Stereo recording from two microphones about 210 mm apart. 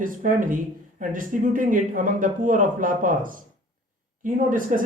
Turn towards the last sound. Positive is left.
turn(degrees=-40)  # may be behind; listen again after turning